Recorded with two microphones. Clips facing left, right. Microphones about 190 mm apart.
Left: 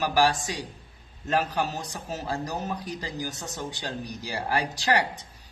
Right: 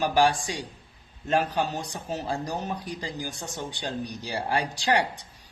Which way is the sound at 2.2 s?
15° right (ahead or behind).